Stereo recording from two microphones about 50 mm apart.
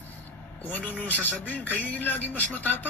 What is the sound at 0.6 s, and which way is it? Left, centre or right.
Speech, left.